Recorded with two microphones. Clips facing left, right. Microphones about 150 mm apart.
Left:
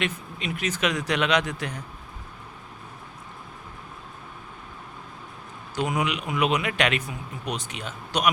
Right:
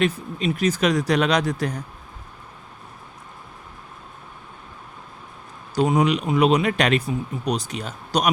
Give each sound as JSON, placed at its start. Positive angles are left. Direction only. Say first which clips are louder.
{"t": 0.0, "sound": "speech", "louder": "right 8 dB", "side_deg": -35}
{"t": 5.7, "sound": "speech", "louder": "right 7 dB", "side_deg": -35}